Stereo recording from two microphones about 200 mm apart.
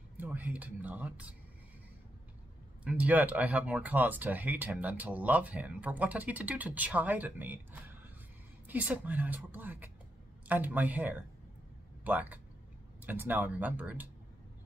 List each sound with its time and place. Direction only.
0.2 s speech: 10° right (ahead or behind)
2.8 s speech: 5° right (ahead or behind)